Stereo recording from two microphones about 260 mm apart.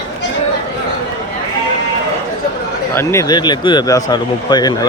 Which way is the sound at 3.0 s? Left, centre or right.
Centre.